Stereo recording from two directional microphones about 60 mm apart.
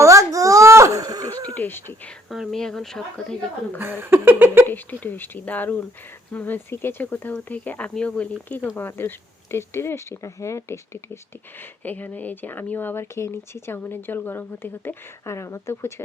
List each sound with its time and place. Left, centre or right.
0.0 s baby cry: right
1.5 s speech: left
2.3 s speech: centre
2.6 s speech: centre
3.8 s a sound: right
4.7 s speech: left
8.4 s speech: left
11.6 s speech: left